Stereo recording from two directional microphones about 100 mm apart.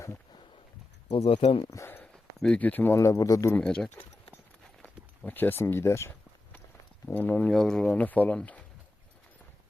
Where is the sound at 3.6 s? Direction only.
10° left (ahead or behind).